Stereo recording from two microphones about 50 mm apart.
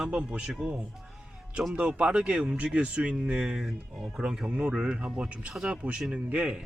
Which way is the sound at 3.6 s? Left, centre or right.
Centre.